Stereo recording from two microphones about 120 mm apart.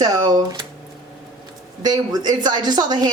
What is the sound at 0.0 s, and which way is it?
Speech, 35° right (ahead or behind).